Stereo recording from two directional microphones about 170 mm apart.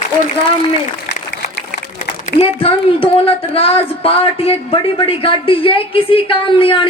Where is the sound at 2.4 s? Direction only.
35° left (ahead or behind).